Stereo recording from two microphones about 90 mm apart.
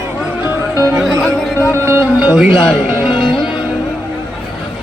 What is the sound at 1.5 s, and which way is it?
Music, 25° left (ahead or behind).